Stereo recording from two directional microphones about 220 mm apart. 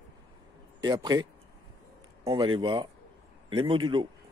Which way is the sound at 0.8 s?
20° right (ahead or behind).